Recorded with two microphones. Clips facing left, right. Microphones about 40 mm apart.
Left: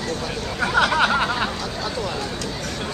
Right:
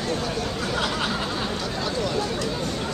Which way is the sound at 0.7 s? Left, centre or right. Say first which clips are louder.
Left 10 dB; left.